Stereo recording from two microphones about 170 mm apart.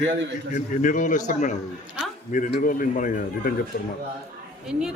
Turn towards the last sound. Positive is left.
turn(degrees=-5)  # may be behind; listen again after turning